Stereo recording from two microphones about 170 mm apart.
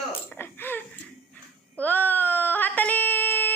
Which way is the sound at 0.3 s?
15° left (ahead or behind).